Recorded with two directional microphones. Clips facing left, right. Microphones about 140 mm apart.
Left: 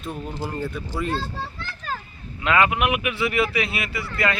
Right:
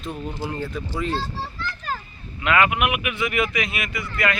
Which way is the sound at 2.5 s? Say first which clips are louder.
Even; 25° left (ahead or behind).